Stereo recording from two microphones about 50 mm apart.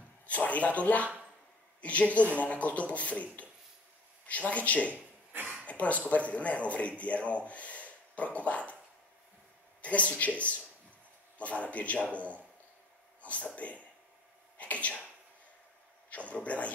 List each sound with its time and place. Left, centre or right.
0.3 s a man's voice: left
4.9 s a sound: right
5.7 s a man's voice: left
9.8 s a man's voice: left
16.1 s a man's voice: left